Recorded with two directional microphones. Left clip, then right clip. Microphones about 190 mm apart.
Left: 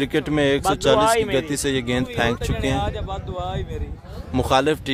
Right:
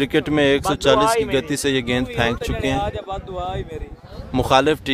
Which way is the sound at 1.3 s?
5° right (ahead or behind).